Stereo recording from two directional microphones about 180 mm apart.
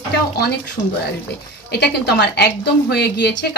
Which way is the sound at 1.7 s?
65° left (ahead or behind).